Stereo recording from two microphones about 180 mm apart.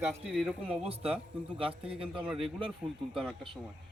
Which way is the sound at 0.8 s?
35° right (ahead or behind).